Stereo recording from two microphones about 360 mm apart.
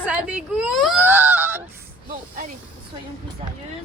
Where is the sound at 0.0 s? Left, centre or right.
Centre.